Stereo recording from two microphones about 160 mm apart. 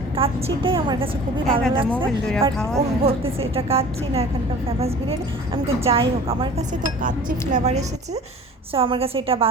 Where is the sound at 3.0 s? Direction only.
35° right (ahead or behind).